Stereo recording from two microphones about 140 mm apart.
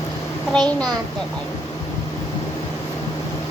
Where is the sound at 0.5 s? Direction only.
5° left (ahead or behind).